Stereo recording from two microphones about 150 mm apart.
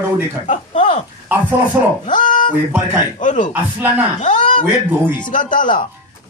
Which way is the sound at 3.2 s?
55° left (ahead or behind).